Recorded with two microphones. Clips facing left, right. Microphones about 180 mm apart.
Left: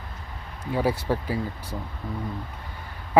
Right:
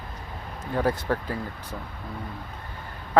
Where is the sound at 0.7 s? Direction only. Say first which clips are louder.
Left 1 dB; 10° left (ahead or behind).